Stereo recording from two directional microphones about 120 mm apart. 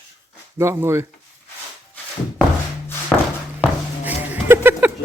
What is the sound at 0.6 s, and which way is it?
Speech, 20° right (ahead or behind).